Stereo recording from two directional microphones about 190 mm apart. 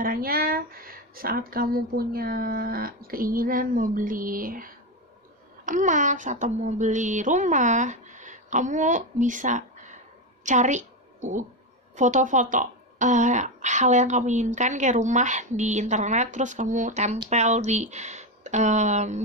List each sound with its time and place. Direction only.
0.0 s a woman's voice: 50° right (ahead or behind)